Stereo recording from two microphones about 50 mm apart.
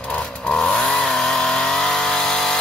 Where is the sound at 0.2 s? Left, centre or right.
Centre.